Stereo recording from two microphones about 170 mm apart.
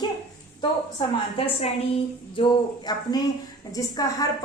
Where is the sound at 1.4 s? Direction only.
35° left (ahead or behind).